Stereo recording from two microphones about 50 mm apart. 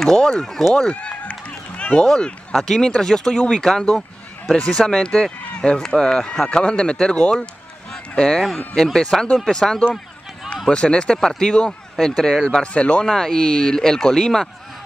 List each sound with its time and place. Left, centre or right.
0.0 s speech: centre
0.7 s run: left
1.8 s a sound: left
2.0 s speech: centre
6.6 s speech: left
8.8 s speech: centre
12.7 s speech: left